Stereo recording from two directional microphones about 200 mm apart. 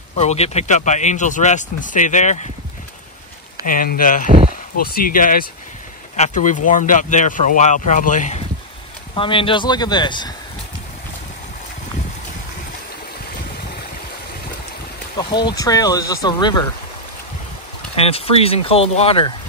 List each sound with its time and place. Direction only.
0.2 s speech: 30° left (ahead or behind)
3.6 s speech: 45° left (ahead or behind)
9.1 s speech: 25° left (ahead or behind)
15.1 s speech: 20° left (ahead or behind)
17.9 s speech: 30° left (ahead or behind)